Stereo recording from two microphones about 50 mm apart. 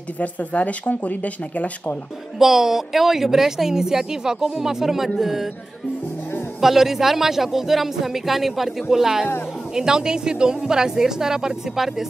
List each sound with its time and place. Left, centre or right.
0.2 s speech: left
2.3 s a woman's voice: centre
6.6 s a woman's voice: centre